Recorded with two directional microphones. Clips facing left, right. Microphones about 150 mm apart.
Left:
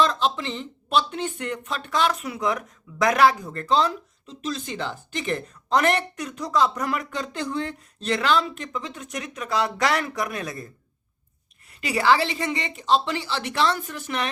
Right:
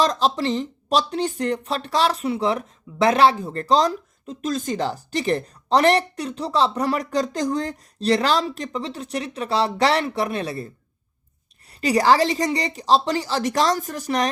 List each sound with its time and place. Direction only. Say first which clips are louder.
0.0 s speech: right 3 dB; 40° right (ahead or behind)
11.7 s speech: right 3 dB; 35° right (ahead or behind)